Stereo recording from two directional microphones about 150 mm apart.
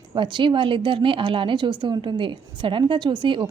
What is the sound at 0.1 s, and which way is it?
A woman's voice, 30° right (ahead or behind).